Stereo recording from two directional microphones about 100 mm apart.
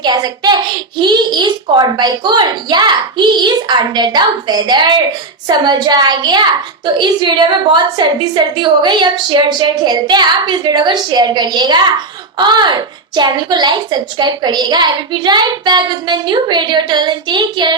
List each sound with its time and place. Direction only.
0.0 s a woman's voice: 45° right (ahead or behind)